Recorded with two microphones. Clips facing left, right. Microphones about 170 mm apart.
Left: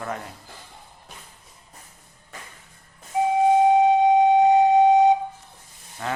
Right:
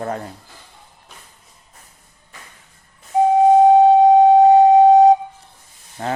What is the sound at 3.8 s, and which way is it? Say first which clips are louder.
Flute: right 6 dB; 35° right (ahead or behind).